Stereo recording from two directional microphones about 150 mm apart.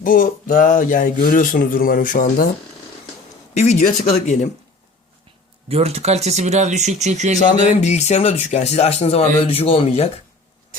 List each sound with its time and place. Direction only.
0.0 s speech: 65° left (ahead or behind)
3.6 s speech: 55° left (ahead or behind)
5.6 s speech: 45° right (ahead or behind)
7.3 s speech: 50° left (ahead or behind)